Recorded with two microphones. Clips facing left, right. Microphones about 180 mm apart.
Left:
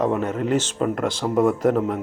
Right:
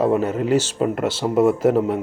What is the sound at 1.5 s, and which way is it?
Speech, 30° right (ahead or behind).